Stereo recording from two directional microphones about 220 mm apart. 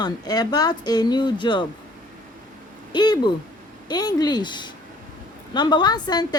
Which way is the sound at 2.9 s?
20° left (ahead or behind).